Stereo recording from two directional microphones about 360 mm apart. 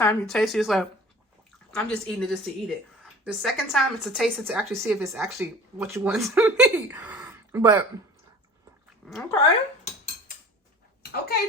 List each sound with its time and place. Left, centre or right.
0.0 s a woman's voice: centre
9.0 s a woman's voice: centre
11.0 s a sound: left